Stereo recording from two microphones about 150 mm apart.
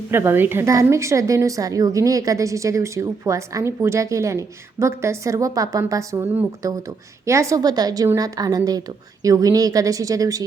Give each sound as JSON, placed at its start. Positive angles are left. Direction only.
{"t": 0.1, "sound": "a woman's voice", "side_deg": -15}